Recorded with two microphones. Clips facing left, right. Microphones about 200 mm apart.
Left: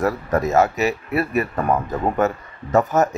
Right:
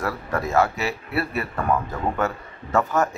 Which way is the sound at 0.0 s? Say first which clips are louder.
Left 6 dB; 20° left (ahead or behind).